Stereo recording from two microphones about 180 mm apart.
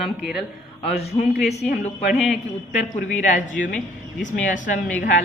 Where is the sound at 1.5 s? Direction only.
40° left (ahead or behind).